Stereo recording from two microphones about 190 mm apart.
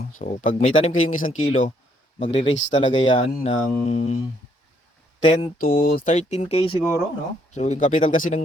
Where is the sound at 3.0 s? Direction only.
30° left (ahead or behind).